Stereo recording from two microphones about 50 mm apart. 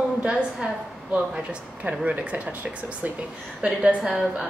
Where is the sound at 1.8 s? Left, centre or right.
Right.